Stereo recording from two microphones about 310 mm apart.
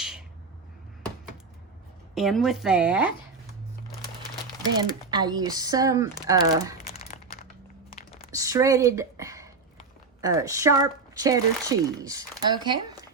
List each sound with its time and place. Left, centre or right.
2.1 s a woman's voice: centre
5.1 s speech: centre
6.8 s crumpling: left
7.9 s a sound: left
8.3 s a sound: centre
10.2 s speech: centre